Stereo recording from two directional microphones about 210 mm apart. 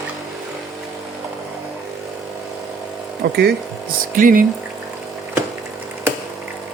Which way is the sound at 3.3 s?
45° right (ahead or behind).